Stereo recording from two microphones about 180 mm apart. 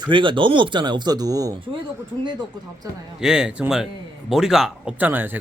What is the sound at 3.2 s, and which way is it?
A man's voice, 5° right (ahead or behind).